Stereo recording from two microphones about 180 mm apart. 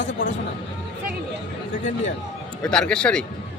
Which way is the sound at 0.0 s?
90° left.